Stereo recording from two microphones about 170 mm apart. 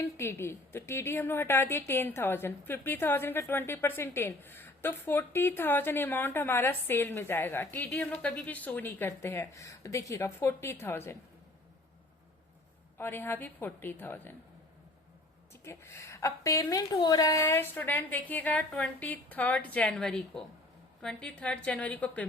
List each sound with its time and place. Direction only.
0.0 s a woman's voice: 15° left (ahead or behind)
13.0 s a woman's voice: 15° left (ahead or behind)
15.6 s a woman's voice: 15° left (ahead or behind)